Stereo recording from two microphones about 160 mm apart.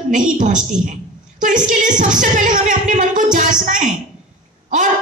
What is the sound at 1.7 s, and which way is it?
A woman's voice, 55° right (ahead or behind).